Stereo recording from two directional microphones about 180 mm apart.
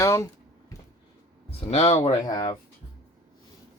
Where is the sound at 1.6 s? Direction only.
35° left (ahead or behind).